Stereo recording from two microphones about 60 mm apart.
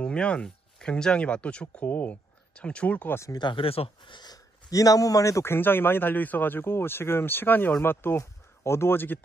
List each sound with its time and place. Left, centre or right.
0.0 s speech: centre
4.3 s speech: left
5.4 s speech: left